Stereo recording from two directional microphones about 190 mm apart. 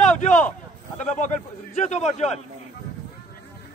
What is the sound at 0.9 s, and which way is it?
A man's voice, 40° left (ahead or behind).